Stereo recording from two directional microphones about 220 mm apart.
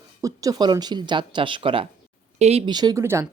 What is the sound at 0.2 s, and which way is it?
Speech, 15° right (ahead or behind).